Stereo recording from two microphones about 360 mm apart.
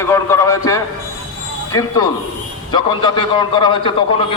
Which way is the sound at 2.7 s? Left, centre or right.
Centre.